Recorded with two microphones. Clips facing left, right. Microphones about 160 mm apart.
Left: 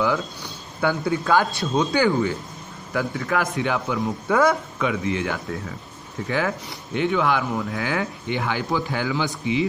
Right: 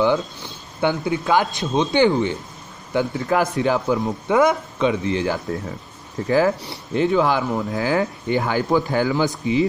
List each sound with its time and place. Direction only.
0.0 s speech: 25° right (ahead or behind)
4.3 s speech: 20° right (ahead or behind); by 9.3 s 40° right (ahead or behind)